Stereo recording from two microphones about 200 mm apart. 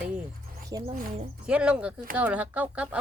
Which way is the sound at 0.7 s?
20° right (ahead or behind).